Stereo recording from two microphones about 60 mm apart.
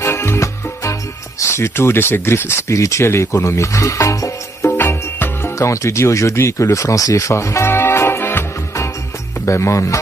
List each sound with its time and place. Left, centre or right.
0.0 s music: left
1.4 s speech: left
2.7 s speech: left
4.6 s music: left
5.6 s speech: left
7.6 s music: left
9.5 s speech: left